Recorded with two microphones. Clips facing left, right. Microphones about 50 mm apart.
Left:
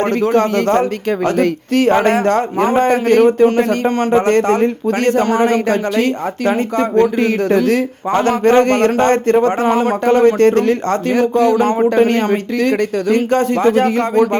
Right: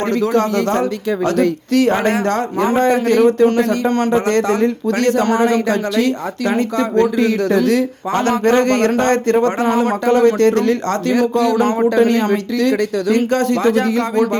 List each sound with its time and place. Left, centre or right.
0.0 s a man's voice: left
3.8 s a man's voice: centre
4.1 s a man's voice: left
10.0 s a man's voice: left